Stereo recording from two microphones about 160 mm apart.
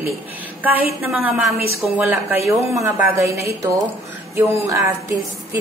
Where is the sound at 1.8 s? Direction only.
10° right (ahead or behind).